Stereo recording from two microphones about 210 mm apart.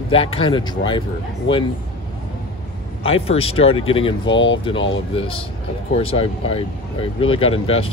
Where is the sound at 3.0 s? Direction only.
25° left (ahead or behind).